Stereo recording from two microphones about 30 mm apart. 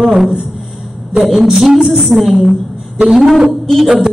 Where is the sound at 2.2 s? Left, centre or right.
Centre.